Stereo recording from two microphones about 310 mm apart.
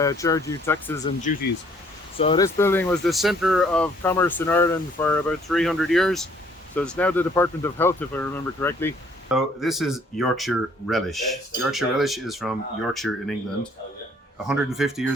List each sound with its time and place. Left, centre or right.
0.0 s speech: centre
1.2 s speech: left
2.1 s speech: centre
14.4 s speech: centre